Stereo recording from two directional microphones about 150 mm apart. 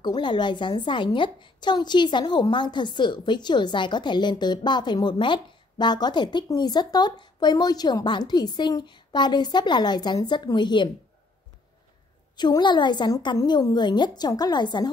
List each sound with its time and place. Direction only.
0.0 s a woman's voice: 30° left (ahead or behind)
12.4 s a woman's voice: 30° left (ahead or behind)